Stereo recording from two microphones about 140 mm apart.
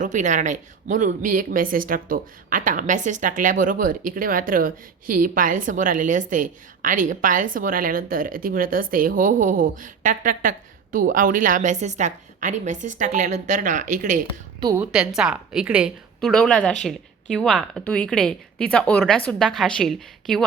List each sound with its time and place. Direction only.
0.0 s speech: 60° right (ahead or behind)
10.9 s a woman's voice: 75° right (ahead or behind)
14.8 s a woman's voice: 5° right (ahead or behind)
16.2 s a woman's voice: 5° left (ahead or behind)